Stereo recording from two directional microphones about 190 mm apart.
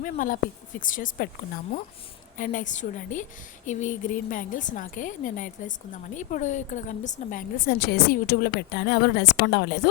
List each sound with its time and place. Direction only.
0.0 s a woman's voice: 45° left (ahead or behind)
2.4 s a woman's voice: 45° left (ahead or behind); by 9.7 s 60° left (ahead or behind)